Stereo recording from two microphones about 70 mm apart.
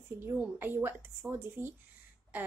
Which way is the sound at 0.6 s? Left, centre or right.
Right.